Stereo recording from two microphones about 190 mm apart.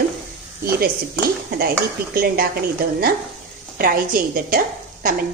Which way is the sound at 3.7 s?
50° right (ahead or behind).